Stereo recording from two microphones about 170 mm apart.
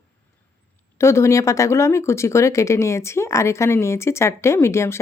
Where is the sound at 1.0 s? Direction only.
15° left (ahead or behind).